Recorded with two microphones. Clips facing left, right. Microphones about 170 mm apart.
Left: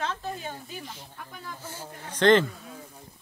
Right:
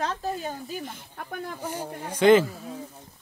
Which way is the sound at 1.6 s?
15° right (ahead or behind).